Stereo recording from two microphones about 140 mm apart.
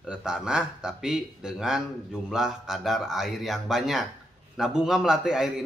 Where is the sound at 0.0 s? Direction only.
5° right (ahead or behind).